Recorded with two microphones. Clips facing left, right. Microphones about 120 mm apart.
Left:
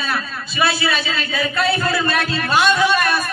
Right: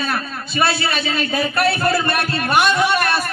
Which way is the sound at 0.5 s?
65° right (ahead or behind).